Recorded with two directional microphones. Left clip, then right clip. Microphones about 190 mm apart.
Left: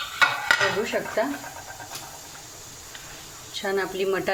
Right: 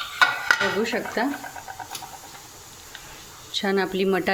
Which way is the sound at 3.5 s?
45° right (ahead or behind).